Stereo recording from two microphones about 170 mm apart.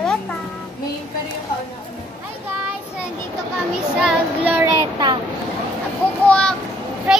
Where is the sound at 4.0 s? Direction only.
5° right (ahead or behind).